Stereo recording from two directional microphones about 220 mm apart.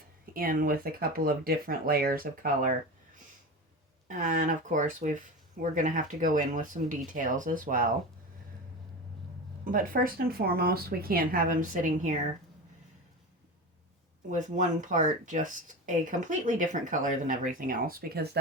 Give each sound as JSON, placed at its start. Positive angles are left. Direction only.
{"t": 0.3, "sound": "speech", "side_deg": -40}
{"t": 4.1, "sound": "speech", "side_deg": -35}
{"t": 9.6, "sound": "speech", "side_deg": -40}
{"t": 14.3, "sound": "speech", "side_deg": -35}